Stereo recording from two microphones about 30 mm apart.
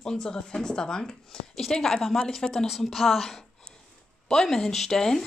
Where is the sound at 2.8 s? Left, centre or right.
Centre.